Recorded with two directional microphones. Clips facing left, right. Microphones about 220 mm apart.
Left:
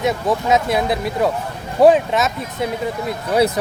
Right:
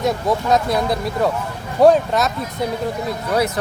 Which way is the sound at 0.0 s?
Centre (ahead or behind).